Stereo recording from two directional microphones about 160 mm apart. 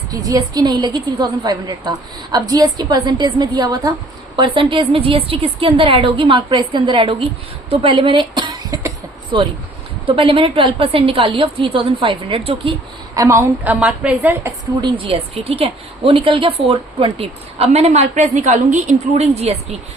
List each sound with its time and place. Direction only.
0.1 s a woman's voice: 25° right (ahead or behind)
13.1 s a woman's voice: 15° right (ahead or behind)
14.8 s a woman's voice: 30° right (ahead or behind)